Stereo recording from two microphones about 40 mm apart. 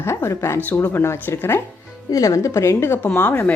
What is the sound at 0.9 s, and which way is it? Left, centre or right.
Speech, left.